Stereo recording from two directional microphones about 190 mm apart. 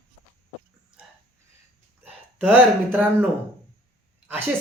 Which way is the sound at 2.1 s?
10° right (ahead or behind).